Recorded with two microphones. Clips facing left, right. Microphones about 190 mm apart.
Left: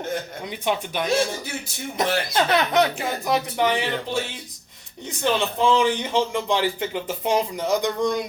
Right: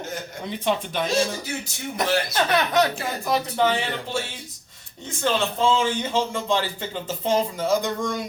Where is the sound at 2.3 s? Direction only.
20° left (ahead or behind).